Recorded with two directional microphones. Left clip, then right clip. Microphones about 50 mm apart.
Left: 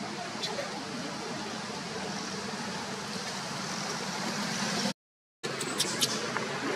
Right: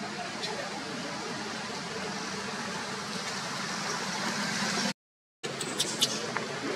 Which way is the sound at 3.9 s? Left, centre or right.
Right.